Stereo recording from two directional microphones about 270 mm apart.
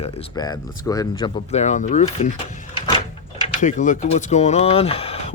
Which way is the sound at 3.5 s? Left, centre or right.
Left.